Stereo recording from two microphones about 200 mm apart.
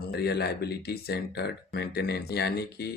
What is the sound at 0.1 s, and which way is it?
Speech, 55° left (ahead or behind).